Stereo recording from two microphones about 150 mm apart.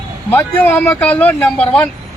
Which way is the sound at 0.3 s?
10° left (ahead or behind).